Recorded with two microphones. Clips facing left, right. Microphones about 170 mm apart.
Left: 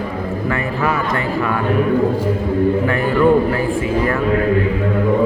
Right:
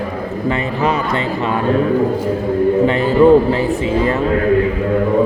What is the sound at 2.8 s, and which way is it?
Speech, 20° right (ahead or behind).